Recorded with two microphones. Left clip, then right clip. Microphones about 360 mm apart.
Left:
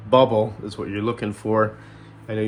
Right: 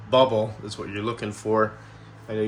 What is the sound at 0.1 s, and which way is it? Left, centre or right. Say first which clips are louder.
Speech: left 3 dB; centre.